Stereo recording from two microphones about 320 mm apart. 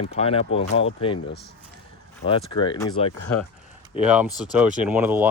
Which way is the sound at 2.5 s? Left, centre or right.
Centre.